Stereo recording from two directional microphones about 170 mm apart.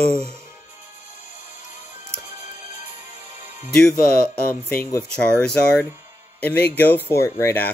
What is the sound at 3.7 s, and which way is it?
Speech, 5° left (ahead or behind).